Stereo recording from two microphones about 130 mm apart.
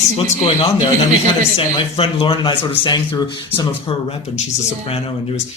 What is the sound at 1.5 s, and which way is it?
A man's voice, 45° left (ahead or behind).